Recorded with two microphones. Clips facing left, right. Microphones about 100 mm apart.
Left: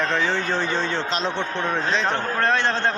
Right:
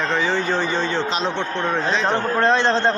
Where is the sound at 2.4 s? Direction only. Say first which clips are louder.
Right 5 dB; 20° right (ahead or behind).